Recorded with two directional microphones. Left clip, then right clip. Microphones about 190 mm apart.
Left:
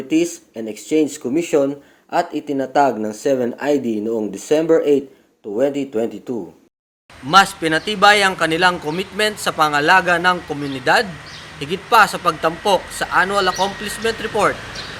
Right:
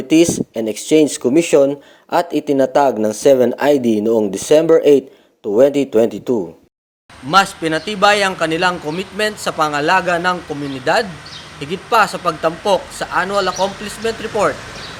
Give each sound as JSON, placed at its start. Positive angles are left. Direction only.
{"t": 0.1, "sound": "speech", "side_deg": -50}
{"t": 7.3, "sound": "a man's voice", "side_deg": 0}